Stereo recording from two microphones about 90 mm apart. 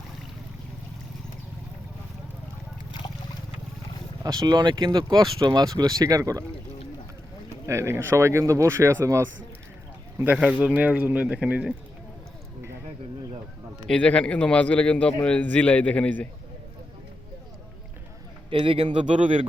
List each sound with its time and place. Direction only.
4.2 s speech: 45° right (ahead or behind)
7.7 s speech: 30° right (ahead or behind)
10.2 s speech: 15° right (ahead or behind)
13.8 s a man's voice: 15° left (ahead or behind)
18.5 s speech: 90° right